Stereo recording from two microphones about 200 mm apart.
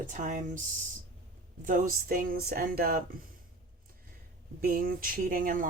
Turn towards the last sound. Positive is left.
turn(degrees=-45)  # may be behind; listen again after turning